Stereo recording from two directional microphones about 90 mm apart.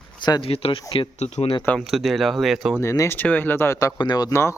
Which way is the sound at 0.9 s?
75° left (ahead or behind).